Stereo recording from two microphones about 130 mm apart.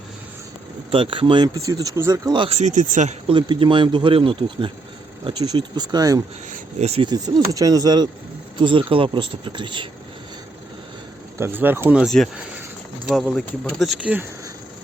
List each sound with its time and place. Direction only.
0.9 s speech: 40° right (ahead or behind)
1.5 s speech: 25° right (ahead or behind)
2.6 s speech: 70° right (ahead or behind)
3.2 s speech: 40° right (ahead or behind)
6.5 s speech: 55° right (ahead or behind)
7.0 s speech: 35° right (ahead or behind)
11.3 s speech: 20° right (ahead or behind)
12.0 s speech: centre (ahead or behind)
14.0 s speech: 10° right (ahead or behind)